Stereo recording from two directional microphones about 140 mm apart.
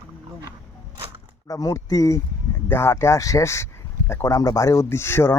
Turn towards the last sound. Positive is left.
turn(degrees=15)  # may be behind; listen again after turning